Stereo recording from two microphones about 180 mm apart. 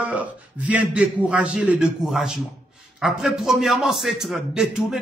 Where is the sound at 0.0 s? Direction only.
10° right (ahead or behind).